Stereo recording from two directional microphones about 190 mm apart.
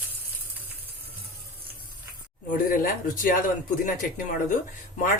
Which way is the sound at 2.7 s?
45° left (ahead or behind).